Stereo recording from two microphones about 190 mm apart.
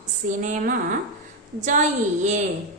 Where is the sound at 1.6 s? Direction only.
40° right (ahead or behind).